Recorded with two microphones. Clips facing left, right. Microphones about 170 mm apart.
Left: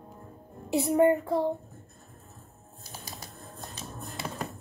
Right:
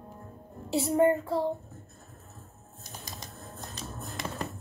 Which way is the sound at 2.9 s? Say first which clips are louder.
Even; 5° left (ahead or behind).